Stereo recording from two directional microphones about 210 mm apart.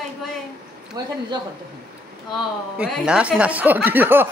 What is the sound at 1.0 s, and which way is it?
Speech, 20° right (ahead or behind).